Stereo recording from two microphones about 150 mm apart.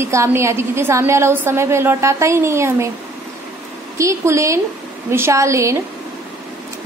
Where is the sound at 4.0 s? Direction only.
20° right (ahead or behind).